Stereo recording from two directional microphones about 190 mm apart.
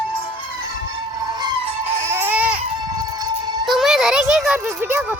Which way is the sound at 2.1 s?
10° right (ahead or behind).